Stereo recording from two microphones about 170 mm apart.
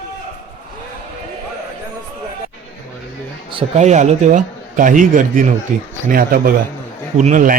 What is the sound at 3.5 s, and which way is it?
A man's voice, 40° right (ahead or behind).